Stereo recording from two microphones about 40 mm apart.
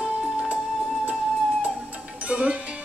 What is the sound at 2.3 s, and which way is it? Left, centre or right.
Music, right.